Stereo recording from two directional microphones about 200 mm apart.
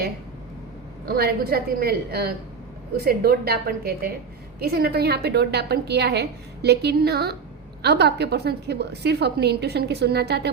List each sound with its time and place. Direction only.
1.0 s a woman's voice: 50° right (ahead or behind)